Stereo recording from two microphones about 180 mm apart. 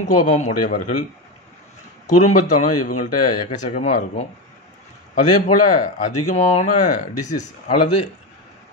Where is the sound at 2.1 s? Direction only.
40° left (ahead or behind).